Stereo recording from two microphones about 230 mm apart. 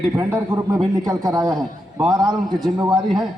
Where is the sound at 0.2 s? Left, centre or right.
Centre.